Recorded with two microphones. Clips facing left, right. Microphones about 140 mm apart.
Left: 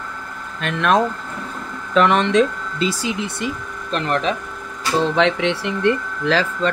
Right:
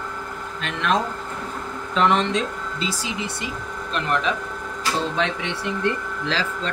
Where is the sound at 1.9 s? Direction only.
65° left (ahead or behind).